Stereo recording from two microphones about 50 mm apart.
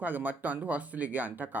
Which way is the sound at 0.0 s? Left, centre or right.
Right.